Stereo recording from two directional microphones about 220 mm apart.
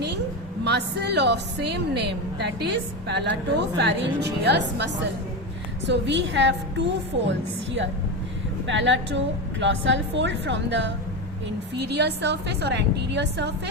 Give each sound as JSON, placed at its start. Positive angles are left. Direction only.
{"t": 0.6, "sound": "a woman's voice", "side_deg": -50}
{"t": 5.9, "sound": "a woman's voice", "side_deg": -55}